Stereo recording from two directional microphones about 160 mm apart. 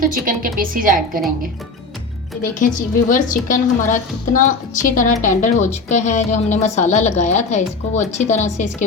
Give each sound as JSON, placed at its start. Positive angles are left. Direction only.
{"t": 0.0, "sound": "speech", "side_deg": -60}
{"t": 2.4, "sound": "a woman's voice", "side_deg": 55}